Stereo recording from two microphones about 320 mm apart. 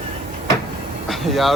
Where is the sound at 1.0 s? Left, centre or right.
Centre.